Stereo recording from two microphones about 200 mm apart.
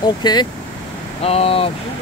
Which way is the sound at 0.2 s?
20° left (ahead or behind).